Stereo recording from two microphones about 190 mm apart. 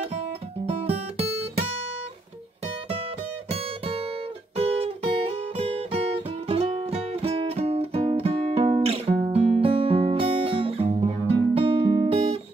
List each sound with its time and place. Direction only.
0.7 s guitar: 30° right (ahead or behind)
2.6 s music: 30° right (ahead or behind)
4.6 s guitar: 30° right (ahead or behind)
9.6 s music: 30° right (ahead or behind)